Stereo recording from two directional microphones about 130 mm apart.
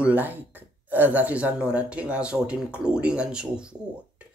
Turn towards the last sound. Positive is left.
turn(degrees=-10)  # may be behind; listen again after turning